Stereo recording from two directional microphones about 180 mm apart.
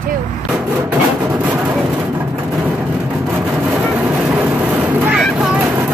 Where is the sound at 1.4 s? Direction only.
5° right (ahead or behind).